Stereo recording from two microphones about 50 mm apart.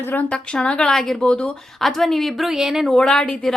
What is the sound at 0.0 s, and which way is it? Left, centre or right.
Speech, left.